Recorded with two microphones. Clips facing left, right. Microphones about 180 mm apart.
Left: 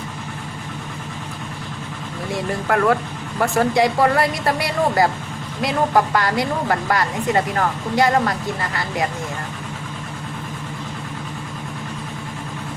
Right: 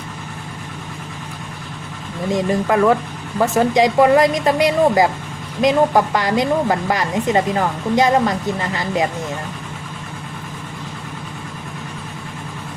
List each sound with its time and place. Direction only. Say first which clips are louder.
2.3 s speech: right 4 dB; 20° right (ahead or behind)